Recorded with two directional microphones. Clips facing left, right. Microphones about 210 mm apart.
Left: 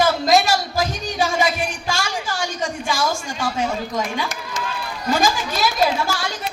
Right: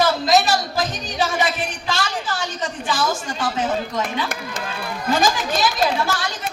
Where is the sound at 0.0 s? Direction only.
10° left (ahead or behind).